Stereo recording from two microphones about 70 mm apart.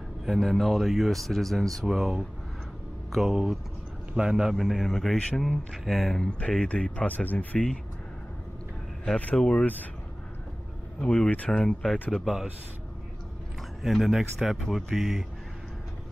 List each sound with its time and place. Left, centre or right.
0.2 s a man's voice: centre
9.0 s speech: centre
11.0 s speech: centre
13.9 s speech: centre